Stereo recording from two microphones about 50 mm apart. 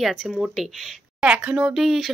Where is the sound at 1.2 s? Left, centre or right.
Right.